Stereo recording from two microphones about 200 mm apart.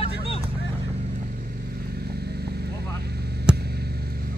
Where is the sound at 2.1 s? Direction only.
55° right (ahead or behind).